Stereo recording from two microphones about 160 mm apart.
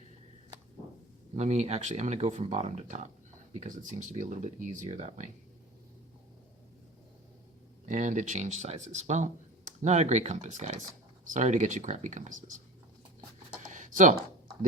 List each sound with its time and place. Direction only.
1.4 s speech: 45° right (ahead or behind)
7.9 s speech: 50° right (ahead or behind)
13.7 s a sound: 55° right (ahead or behind)